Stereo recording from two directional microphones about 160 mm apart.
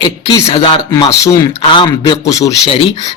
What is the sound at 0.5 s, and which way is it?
A man's voice, 25° left (ahead or behind).